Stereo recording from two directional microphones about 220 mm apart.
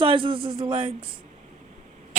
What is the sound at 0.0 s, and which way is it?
Speech, 25° right (ahead or behind).